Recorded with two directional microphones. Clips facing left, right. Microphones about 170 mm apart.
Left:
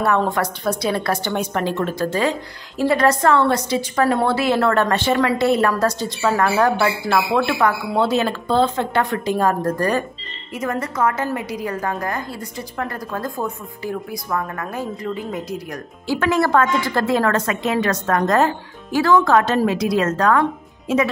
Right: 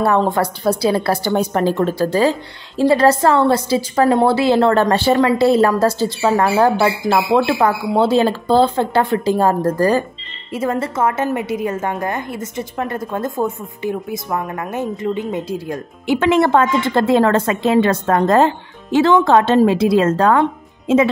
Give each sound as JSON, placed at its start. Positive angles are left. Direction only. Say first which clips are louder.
{"t": 0.0, "sound": "a woman's voice", "louder": "right 3 dB", "side_deg": -30}